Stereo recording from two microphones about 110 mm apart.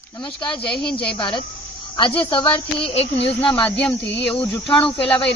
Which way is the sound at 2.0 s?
50° left (ahead or behind).